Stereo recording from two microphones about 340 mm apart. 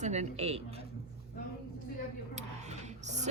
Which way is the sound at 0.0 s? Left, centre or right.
Centre.